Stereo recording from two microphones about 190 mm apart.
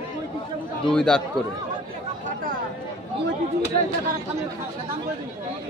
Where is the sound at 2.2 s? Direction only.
45° right (ahead or behind).